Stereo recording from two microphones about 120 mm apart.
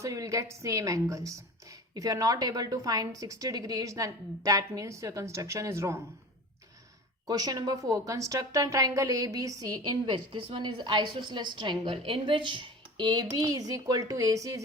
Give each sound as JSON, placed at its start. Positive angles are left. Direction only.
{"t": 0.0, "sound": "a woman's voice", "side_deg": -25}
{"t": 7.3, "sound": "a woman's voice", "side_deg": -35}